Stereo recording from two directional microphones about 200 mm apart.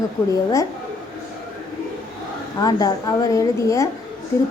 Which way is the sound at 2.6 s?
20° left (ahead or behind).